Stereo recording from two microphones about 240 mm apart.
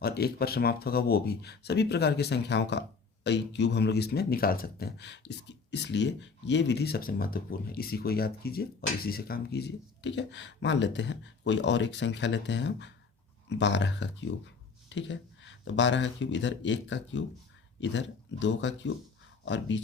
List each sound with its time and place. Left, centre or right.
0.0 s speech: left